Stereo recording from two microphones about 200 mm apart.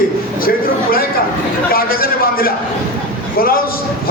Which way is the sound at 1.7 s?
50° left (ahead or behind).